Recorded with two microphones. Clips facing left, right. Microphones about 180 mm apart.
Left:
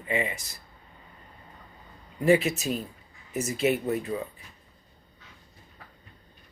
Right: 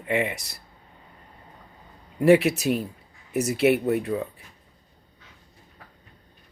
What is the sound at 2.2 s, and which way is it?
Speech, 70° right (ahead or behind).